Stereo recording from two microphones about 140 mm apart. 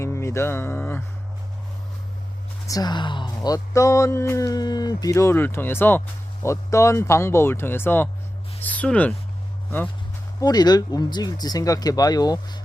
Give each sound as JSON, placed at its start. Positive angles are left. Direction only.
{"t": 0.0, "sound": "music", "side_deg": 20}
{"t": 2.6, "sound": "speech", "side_deg": 30}
{"t": 10.4, "sound": "speech", "side_deg": 30}